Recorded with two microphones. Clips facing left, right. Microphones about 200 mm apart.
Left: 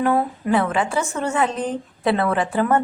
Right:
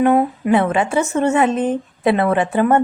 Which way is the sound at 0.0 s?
20° right (ahead or behind).